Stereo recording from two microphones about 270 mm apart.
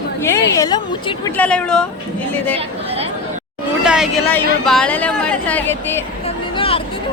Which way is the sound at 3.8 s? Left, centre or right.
Centre.